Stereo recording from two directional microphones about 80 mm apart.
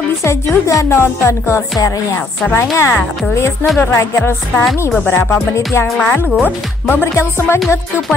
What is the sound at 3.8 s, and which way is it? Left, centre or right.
Speech, left.